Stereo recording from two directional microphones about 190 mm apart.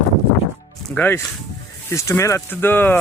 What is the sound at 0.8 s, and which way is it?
Music, 10° left (ahead or behind).